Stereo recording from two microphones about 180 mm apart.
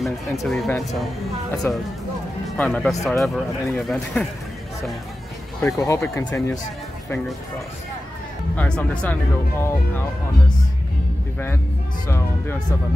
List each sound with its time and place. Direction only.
0.0 s speech: centre (ahead or behind)
1.6 s speech: 15° left (ahead or behind)
5.7 s speech: 15° left (ahead or behind)
8.5 s speech: 5° left (ahead or behind)
12.1 s speech: 15° left (ahead or behind)